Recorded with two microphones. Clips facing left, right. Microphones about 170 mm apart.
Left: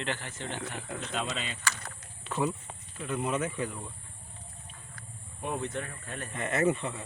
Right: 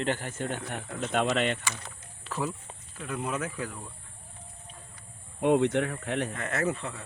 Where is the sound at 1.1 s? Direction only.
65° right (ahead or behind).